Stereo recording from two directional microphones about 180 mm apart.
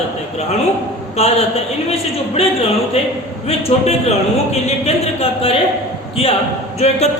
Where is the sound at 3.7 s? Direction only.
35° left (ahead or behind).